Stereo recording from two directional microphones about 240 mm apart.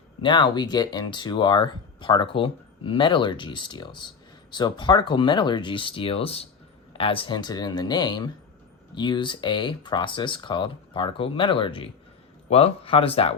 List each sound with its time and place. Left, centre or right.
0.2 s speech: centre